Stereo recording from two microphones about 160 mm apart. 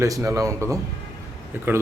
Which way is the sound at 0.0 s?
20° right (ahead or behind).